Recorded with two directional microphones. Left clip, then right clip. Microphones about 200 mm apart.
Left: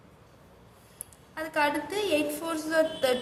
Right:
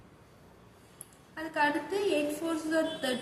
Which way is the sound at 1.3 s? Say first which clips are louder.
Left 2 dB; 60° left (ahead or behind).